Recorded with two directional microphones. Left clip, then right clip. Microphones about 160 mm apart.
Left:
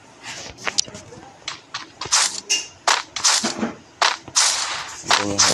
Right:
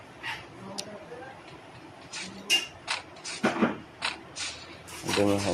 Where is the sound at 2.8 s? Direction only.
55° left (ahead or behind).